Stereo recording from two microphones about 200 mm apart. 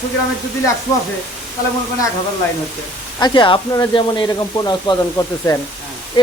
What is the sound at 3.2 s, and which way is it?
Speech, 20° left (ahead or behind).